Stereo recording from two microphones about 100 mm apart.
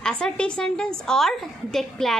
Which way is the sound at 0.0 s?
10° left (ahead or behind).